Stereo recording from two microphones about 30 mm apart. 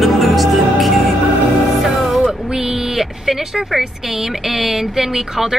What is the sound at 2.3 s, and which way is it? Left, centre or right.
Music, right.